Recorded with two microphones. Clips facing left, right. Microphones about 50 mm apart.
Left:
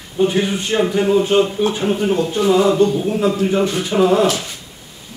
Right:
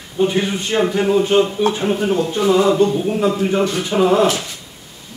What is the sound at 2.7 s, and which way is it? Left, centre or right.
Speech, centre.